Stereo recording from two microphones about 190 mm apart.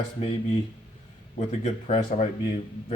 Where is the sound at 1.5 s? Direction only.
35° left (ahead or behind).